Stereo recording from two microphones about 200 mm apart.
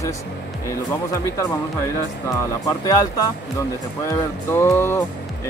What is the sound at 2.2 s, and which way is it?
Speech, 20° left (ahead or behind).